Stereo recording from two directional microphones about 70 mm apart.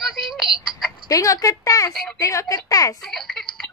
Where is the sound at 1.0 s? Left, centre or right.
Left.